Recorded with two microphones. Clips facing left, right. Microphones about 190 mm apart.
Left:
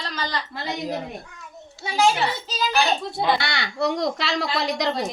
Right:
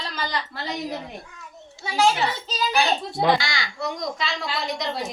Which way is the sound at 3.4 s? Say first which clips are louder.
Left 5 dB; 65° left (ahead or behind).